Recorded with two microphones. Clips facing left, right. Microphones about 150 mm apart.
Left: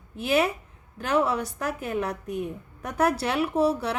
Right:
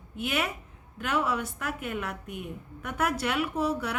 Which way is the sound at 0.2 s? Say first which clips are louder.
Left 7 dB; 35° left (ahead or behind).